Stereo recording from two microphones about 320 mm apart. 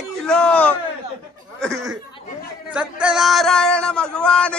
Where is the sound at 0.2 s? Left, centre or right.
Centre.